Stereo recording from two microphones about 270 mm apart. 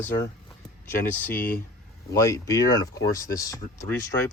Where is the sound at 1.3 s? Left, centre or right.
Left.